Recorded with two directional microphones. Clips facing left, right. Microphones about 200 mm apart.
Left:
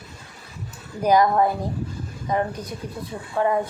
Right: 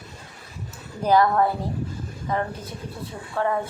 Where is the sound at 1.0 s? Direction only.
15° left (ahead or behind).